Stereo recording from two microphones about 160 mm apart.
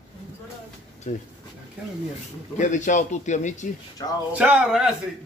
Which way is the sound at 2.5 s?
50° left (ahead or behind).